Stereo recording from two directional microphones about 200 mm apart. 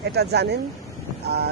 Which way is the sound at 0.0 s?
55° right (ahead or behind).